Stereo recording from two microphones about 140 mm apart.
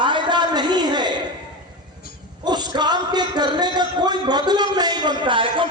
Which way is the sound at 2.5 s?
30° right (ahead or behind).